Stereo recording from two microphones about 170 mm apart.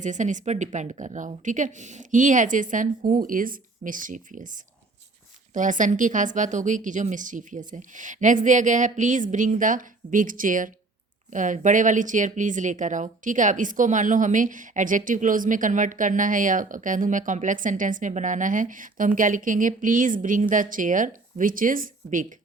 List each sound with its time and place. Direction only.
0.0 s speech: 45° right (ahead or behind)
5.5 s speech: 50° right (ahead or behind)